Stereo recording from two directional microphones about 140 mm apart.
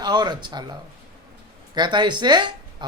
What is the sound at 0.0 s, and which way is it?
Speech, 30° right (ahead or behind).